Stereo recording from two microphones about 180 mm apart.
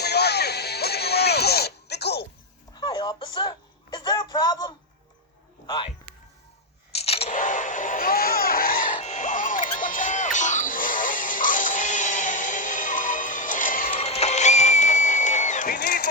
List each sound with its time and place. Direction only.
0.0 s music: 65° left (ahead or behind)
2.8 s a sound: 25° left (ahead or behind)
6.9 s scissors: 35° left (ahead or behind)
7.3 s music: 45° left (ahead or behind)
13.9 s music: 35° left (ahead or behind); by 16.0 s 55° left (ahead or behind)